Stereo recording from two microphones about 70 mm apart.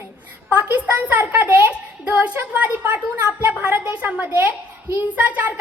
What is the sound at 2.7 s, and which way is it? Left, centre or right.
A woman's voice, right.